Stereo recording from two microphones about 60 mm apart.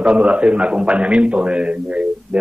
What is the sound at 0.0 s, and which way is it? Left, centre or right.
Speech, right.